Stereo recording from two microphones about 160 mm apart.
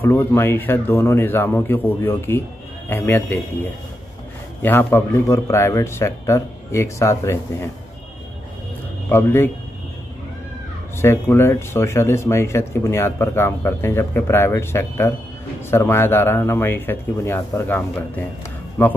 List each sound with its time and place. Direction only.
0.0 s speech: 15° left (ahead or behind)
4.6 s speech: 15° left (ahead or behind)
9.1 s speech: 15° left (ahead or behind)
11.0 s speech: 15° left (ahead or behind)